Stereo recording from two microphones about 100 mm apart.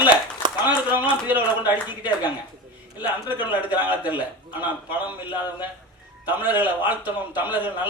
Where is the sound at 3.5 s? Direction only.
15° right (ahead or behind).